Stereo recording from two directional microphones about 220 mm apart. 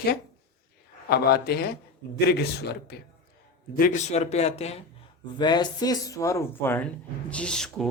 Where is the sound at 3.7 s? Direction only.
35° left (ahead or behind).